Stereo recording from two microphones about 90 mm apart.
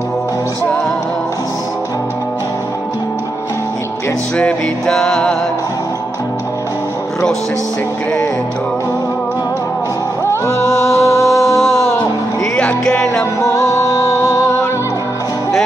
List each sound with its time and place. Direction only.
4.4 s music: 10° left (ahead or behind)
10.2 s music: 30° left (ahead or behind)
12.5 s music: 5° left (ahead or behind)
13.2 s music: 30° left (ahead or behind)